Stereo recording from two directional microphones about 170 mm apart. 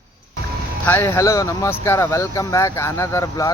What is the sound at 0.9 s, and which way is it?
Speech, 15° left (ahead or behind).